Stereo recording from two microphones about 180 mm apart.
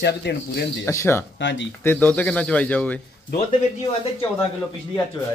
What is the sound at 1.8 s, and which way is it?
Speech, 10° left (ahead or behind).